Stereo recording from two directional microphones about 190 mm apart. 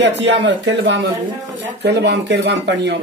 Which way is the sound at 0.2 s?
70° right (ahead or behind).